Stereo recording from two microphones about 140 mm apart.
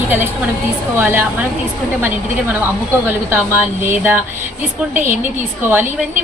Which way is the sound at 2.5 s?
15° right (ahead or behind).